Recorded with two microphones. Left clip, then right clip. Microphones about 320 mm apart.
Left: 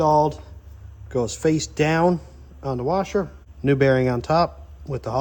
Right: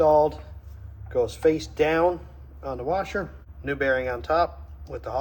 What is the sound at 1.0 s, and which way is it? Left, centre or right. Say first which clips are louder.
Speech: even; left.